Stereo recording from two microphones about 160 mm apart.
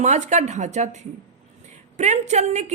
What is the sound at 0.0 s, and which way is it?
A woman's voice, 45° right (ahead or behind).